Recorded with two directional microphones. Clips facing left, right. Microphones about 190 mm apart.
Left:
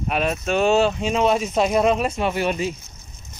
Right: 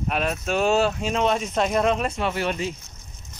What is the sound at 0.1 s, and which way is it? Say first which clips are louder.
Speech: left 3 dB; centre (ahead or behind).